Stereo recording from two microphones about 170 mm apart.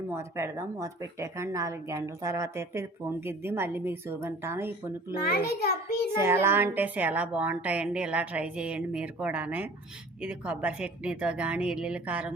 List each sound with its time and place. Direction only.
0.1 s a woman's voice: 15° right (ahead or behind)
5.3 s a child's voice: 65° left (ahead or behind)
6.1 s a woman's voice: 15° right (ahead or behind)